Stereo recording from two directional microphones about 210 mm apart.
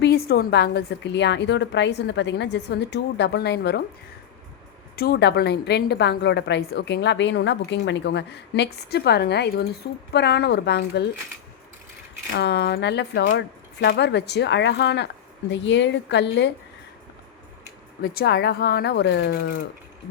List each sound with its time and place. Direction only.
0.0 s a woman's voice: 50° left (ahead or behind)
4.9 s a woman's voice: 45° left (ahead or behind)
12.3 s a woman's voice: 55° left (ahead or behind)
18.0 s a woman's voice: 45° left (ahead or behind)